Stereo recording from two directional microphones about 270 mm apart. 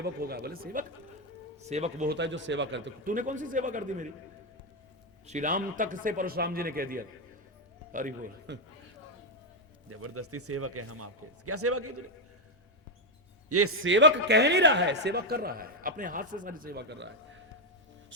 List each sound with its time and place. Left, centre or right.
0.0 s a man's voice: right
2.0 s a man's voice: right
5.2 s a man's voice: right
9.9 s speech: right
13.5 s a man's voice: right